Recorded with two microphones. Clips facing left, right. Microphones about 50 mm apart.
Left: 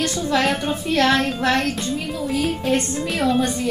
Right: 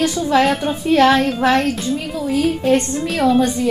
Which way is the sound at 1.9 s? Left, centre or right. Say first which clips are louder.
Right 3 dB; centre.